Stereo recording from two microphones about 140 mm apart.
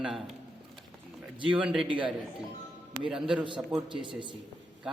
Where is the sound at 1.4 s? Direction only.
35° right (ahead or behind).